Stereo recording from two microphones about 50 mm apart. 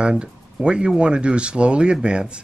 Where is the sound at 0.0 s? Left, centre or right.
Centre.